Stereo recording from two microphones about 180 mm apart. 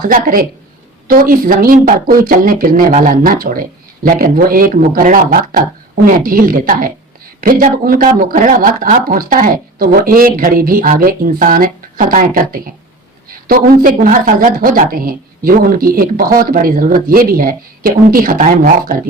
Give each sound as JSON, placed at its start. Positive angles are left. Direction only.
{"t": 0.0, "sound": "a woman's voice", "side_deg": -50}